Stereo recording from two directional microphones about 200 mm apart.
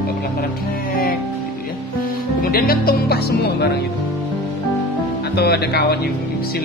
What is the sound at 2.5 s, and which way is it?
Speech, 45° left (ahead or behind).